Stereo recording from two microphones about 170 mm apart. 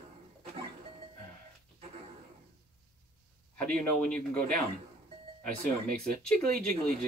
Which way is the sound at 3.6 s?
5° left (ahead or behind).